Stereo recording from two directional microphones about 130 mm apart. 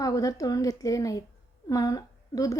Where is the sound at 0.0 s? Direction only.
30° left (ahead or behind).